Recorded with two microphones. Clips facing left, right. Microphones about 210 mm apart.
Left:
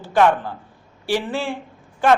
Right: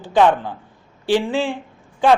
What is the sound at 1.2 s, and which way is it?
Speech, 15° right (ahead or behind).